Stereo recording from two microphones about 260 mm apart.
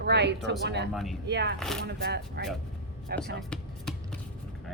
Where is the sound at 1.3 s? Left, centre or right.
Right.